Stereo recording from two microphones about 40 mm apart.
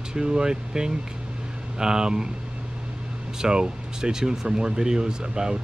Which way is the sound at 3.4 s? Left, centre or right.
Centre.